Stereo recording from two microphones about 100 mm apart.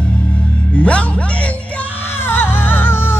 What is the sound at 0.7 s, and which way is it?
Music, 10° left (ahead or behind).